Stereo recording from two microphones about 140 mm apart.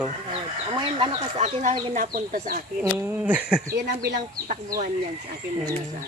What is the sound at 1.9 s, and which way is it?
Speech, 90° right.